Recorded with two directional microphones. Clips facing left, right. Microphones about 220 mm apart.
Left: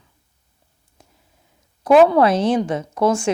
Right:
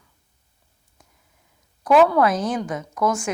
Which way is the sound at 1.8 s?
25° left (ahead or behind).